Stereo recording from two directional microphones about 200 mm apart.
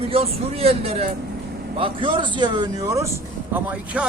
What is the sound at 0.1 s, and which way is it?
Speech, 30° right (ahead or behind).